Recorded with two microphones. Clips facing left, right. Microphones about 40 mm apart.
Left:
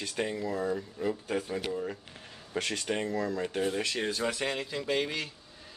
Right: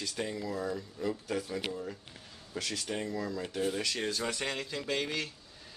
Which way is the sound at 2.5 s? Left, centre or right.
Left.